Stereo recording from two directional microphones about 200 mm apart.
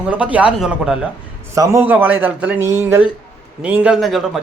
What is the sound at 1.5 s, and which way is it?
A man's voice, 15° right (ahead or behind).